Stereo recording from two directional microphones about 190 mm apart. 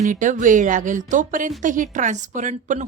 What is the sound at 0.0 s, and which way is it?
Speech, 40° right (ahead or behind).